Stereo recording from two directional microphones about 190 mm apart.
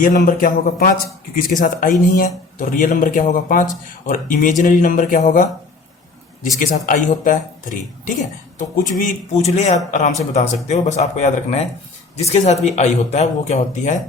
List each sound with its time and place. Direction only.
0.0 s speech: 45° left (ahead or behind)
6.6 s speech: 45° left (ahead or behind)